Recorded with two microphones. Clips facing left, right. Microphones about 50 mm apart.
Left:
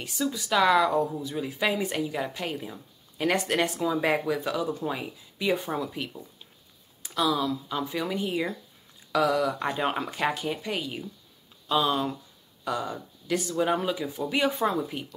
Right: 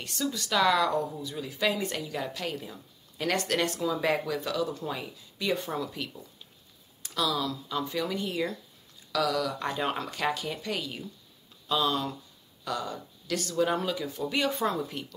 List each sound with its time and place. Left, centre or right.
0.0 s speech: centre
9.1 s speech: left